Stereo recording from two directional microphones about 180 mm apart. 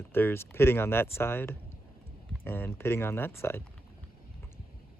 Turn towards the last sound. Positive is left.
turn(degrees=15)  # may be behind; listen again after turning